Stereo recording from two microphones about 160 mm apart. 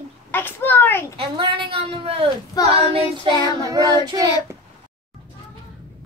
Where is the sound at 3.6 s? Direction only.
20° right (ahead or behind).